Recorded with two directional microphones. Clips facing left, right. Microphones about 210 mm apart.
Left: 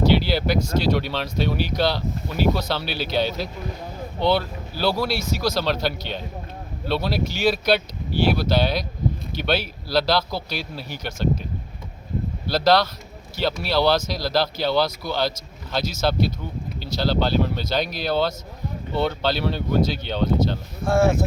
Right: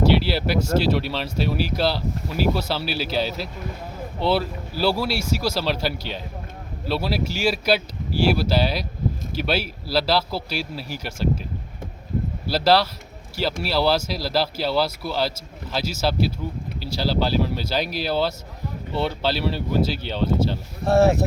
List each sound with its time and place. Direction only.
0.3 s speech: 5° right (ahead or behind)
12.5 s speech: 5° right (ahead or behind)
20.8 s speech: 35° right (ahead or behind)